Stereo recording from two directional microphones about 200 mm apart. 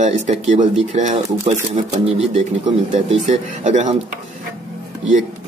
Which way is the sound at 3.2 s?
35° right (ahead or behind).